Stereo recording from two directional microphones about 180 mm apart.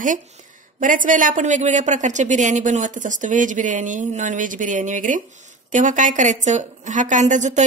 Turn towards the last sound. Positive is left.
turn(degrees=-40)  # may be behind; listen again after turning